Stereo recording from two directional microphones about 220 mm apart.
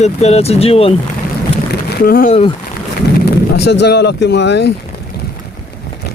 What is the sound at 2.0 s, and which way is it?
Speech, 40° left (ahead or behind).